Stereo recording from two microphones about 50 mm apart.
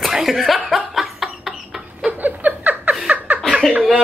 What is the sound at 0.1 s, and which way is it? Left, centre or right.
Speech, centre.